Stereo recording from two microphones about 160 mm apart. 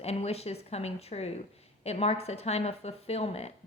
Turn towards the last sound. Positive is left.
turn(degrees=40)  # may be behind; listen again after turning